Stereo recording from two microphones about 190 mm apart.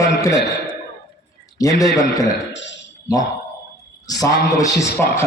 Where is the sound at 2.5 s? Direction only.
70° left (ahead or behind).